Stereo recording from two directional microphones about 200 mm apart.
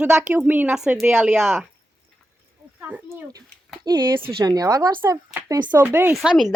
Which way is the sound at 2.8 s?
10° right (ahead or behind).